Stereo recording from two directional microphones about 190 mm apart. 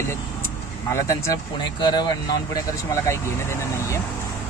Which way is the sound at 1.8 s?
20° left (ahead or behind).